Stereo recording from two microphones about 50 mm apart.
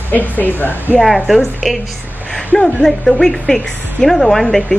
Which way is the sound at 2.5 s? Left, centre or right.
Centre.